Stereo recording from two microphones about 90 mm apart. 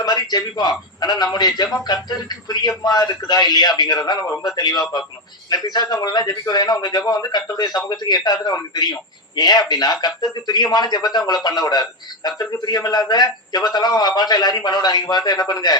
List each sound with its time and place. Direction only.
0.0 s a man's voice: 50° left (ahead or behind)